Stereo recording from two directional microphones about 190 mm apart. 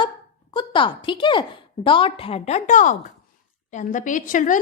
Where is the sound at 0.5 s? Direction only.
25° left (ahead or behind).